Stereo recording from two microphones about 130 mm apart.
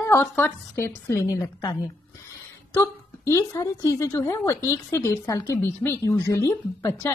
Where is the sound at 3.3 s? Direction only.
25° left (ahead or behind).